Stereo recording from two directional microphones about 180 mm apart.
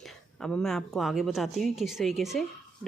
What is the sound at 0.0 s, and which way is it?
Speech, centre (ahead or behind).